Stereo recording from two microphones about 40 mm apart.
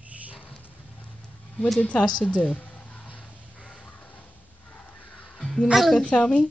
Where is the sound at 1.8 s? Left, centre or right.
Left.